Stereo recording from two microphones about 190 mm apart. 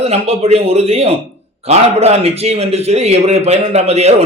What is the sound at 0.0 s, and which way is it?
A man's voice, 35° right (ahead or behind).